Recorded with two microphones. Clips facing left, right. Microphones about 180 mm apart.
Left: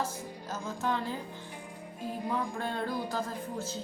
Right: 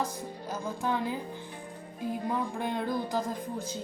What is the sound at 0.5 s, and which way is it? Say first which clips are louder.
Speech: right 1 dB; 15° right (ahead or behind).